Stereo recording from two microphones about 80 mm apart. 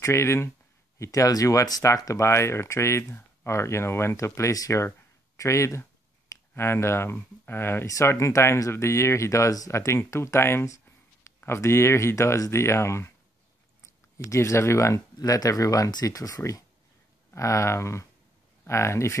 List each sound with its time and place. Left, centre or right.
0.0 s speech: left
5.4 s a sound: left
6.5 s speech: left
7.8 s speech: left
14.1 s speech: left
15.1 s speech: left